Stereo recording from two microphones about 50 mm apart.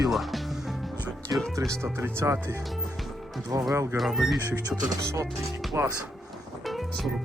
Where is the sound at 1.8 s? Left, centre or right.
Right.